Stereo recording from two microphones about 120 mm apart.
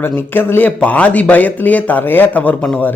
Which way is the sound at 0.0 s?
15° left (ahead or behind).